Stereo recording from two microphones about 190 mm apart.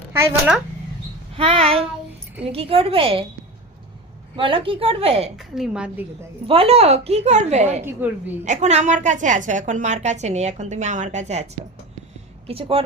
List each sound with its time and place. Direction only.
0.1 s speech: 10° right (ahead or behind)
1.4 s a woman's voice: 30° right (ahead or behind)
4.4 s a woman's voice: 25° right (ahead or behind)
5.4 s a woman's voice: centre (ahead or behind)
6.5 s a woman's voice: 30° right (ahead or behind)
12.5 s a woman's voice: 30° right (ahead or behind)